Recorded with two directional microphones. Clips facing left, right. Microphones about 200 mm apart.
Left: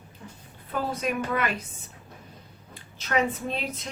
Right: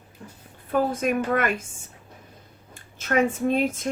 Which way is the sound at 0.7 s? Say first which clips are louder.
Right 6 dB; 50° right (ahead or behind).